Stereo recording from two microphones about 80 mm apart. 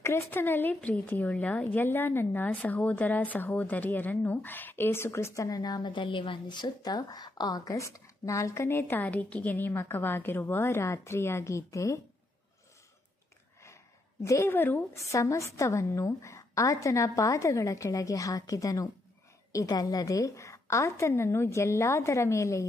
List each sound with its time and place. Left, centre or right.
0.0 s a woman's voice: left
14.2 s a woman's voice: left
14.5 s a woman's voice: left
15.0 s a woman's voice: left